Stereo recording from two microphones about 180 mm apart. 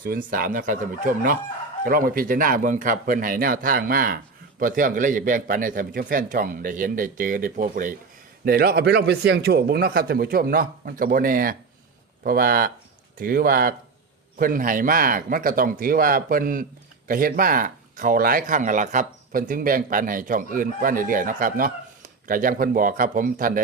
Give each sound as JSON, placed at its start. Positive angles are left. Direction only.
{"t": 0.3, "sound": "speech", "side_deg": -50}